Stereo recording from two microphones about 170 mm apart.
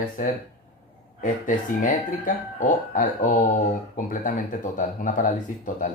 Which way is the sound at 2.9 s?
50° left (ahead or behind).